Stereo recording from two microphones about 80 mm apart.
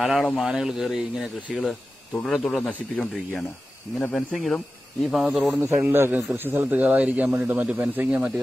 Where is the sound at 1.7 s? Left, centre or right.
Centre.